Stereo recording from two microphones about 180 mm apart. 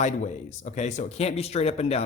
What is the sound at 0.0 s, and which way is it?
Speech, 40° left (ahead or behind).